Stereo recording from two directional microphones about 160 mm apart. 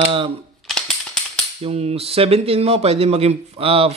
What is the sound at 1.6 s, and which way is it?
Speech, 40° right (ahead or behind).